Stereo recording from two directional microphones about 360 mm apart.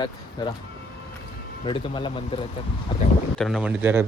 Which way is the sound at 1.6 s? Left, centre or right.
Centre.